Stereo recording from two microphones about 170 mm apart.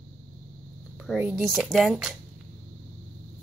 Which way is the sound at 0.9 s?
5° right (ahead or behind).